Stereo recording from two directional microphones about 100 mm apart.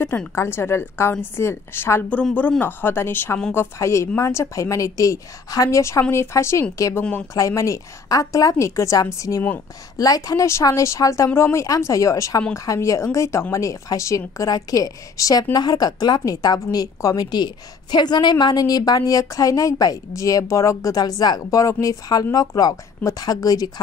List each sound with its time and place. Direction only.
0.3 s a woman's voice: 25° left (ahead or behind)
2.0 s a woman's voice: 15° left (ahead or behind)
7.0 s speech: 15° left (ahead or behind)
7.3 s speech: 30° left (ahead or behind)